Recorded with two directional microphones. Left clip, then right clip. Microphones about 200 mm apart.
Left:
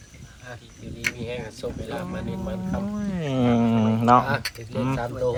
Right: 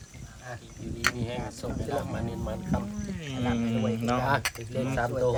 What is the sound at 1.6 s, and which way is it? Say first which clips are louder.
Speech: left 7 dB; 20° left (ahead or behind).